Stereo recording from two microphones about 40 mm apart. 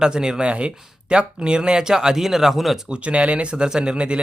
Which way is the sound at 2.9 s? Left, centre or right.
Right.